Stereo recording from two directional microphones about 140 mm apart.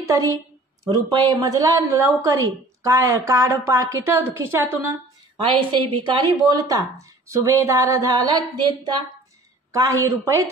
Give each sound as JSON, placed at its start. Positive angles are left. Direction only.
{"t": 0.0, "sound": "a woman's voice", "side_deg": -25}
{"t": 5.4, "sound": "a woman's voice", "side_deg": -35}